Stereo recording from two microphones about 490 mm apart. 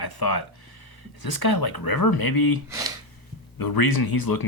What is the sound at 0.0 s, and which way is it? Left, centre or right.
Speech, left.